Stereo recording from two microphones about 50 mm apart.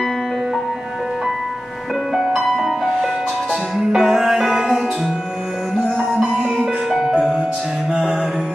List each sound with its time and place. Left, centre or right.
2.1 s music: centre
6.2 s music: centre